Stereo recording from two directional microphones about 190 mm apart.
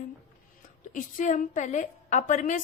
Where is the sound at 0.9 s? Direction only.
45° left (ahead or behind).